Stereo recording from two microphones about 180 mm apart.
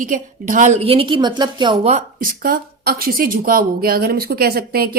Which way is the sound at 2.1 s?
50° right (ahead or behind).